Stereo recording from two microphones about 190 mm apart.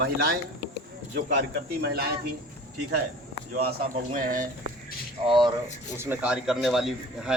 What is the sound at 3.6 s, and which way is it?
Speech, 55° right (ahead or behind).